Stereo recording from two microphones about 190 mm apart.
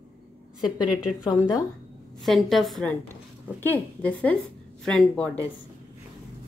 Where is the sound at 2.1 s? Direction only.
Centre (ahead or behind).